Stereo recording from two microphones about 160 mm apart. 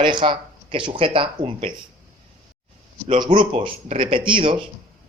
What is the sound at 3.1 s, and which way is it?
A man's voice, 30° right (ahead or behind).